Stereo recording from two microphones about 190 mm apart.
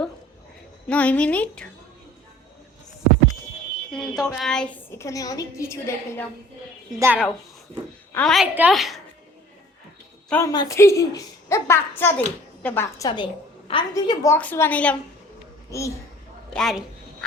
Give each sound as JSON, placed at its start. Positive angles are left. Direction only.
{"t": 0.9, "sound": "a woman's voice", "side_deg": 5}
{"t": 3.9, "sound": "a woman's voice", "side_deg": 0}
{"t": 7.0, "sound": "a woman's voice", "side_deg": -10}
{"t": 8.1, "sound": "a woman's voice", "side_deg": 5}
{"t": 10.2, "sound": "a woman's voice", "side_deg": 10}
{"t": 16.5, "sound": "a sound", "side_deg": 0}